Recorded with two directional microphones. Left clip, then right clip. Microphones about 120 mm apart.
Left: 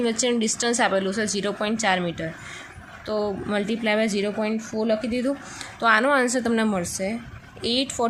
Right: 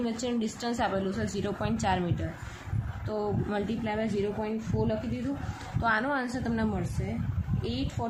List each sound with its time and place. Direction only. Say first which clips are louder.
0.0 s a woman's voice: left 9 dB; 30° left (ahead or behind)
3.8 s a woman's voice: left 10 dB; 60° left (ahead or behind); by 5.2 s 90° left
5.8 s a woman's voice: left 9 dB; 40° left (ahead or behind)
7.6 s speech: left 12 dB; 50° left (ahead or behind)